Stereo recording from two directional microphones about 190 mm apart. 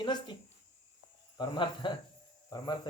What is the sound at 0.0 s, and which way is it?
Speech, 25° left (ahead or behind).